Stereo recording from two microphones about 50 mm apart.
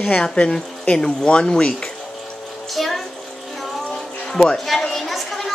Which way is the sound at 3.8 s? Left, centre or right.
Centre.